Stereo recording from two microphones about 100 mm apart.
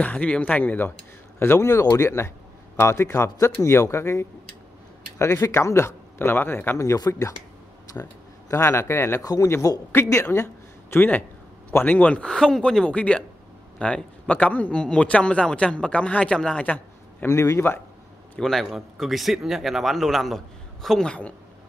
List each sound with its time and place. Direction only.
0.0 s a man's voice: 15° left (ahead or behind)
6.8 s speech: 30° left (ahead or behind)
8.5 s speech: 30° left (ahead or behind)
10.2 s a sound: 25° left (ahead or behind)
11.7 s a man's voice: 20° left (ahead or behind)
17.3 s speech: 30° left (ahead or behind)
18.4 s speech: centre (ahead or behind)